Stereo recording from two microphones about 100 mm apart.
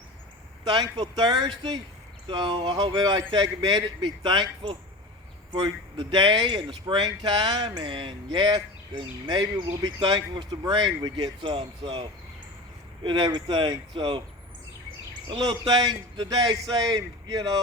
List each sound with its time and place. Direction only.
1.1 s speech: 45° right (ahead or behind); by 12.0 s 60° right (ahead or behind)
13.1 s speech: 50° right (ahead or behind)
15.4 s a man's voice: 40° right (ahead or behind)